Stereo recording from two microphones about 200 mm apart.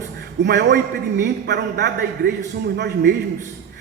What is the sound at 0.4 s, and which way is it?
A man's voice, 60° right (ahead or behind).